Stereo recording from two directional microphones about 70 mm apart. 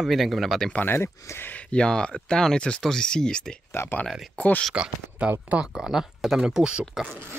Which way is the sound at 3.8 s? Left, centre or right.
Left.